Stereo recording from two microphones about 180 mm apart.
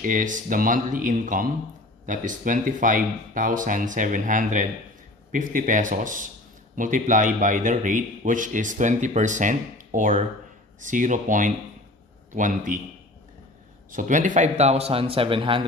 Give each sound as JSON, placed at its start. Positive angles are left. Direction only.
{"t": 0.0, "sound": "a man's voice", "side_deg": -45}
{"t": 13.9, "sound": "a man's voice", "side_deg": -45}